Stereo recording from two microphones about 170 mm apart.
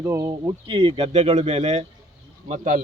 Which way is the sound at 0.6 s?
30° right (ahead or behind).